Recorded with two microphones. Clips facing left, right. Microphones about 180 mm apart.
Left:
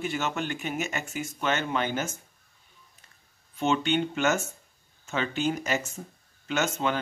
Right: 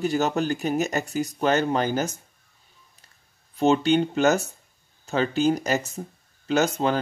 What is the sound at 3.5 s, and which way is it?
Speech, 35° right (ahead or behind).